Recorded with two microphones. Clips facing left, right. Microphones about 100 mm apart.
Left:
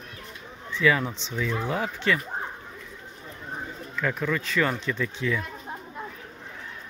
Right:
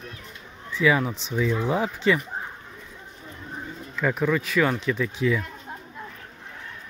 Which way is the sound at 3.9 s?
15° right (ahead or behind).